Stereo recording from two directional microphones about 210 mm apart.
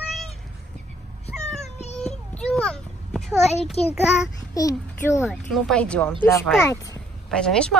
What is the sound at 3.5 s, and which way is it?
Speech, 30° left (ahead or behind).